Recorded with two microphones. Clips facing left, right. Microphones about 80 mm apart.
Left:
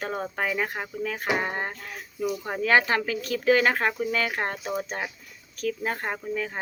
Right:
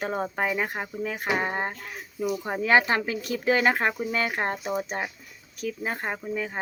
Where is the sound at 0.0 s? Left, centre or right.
Centre.